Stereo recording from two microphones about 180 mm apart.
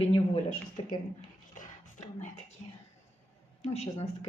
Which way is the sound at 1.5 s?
40° left (ahead or behind).